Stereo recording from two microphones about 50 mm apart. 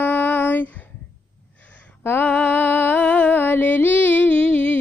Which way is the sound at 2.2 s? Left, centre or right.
Left.